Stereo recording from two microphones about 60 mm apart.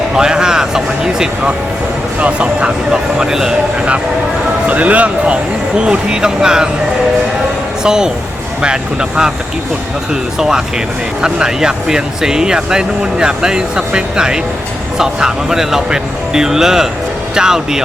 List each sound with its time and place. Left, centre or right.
0.2 s music: centre
2.2 s speech: centre
4.7 s speech: right
7.9 s speech: centre
10.3 s speech: centre